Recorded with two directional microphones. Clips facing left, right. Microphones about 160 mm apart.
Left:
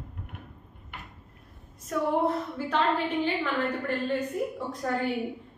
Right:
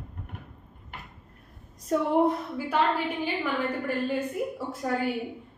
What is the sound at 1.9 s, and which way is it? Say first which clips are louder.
Speech: right 3 dB; 30° right (ahead or behind).